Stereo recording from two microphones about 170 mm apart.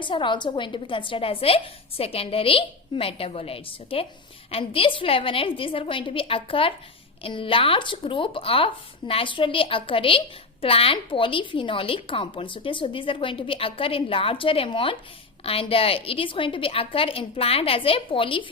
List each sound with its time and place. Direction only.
0.0 s speech: 30° left (ahead or behind)